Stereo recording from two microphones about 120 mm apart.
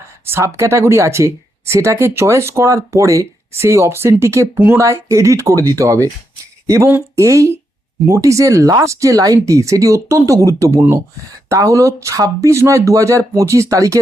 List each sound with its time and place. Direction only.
0.3 s speech: 20° right (ahead or behind)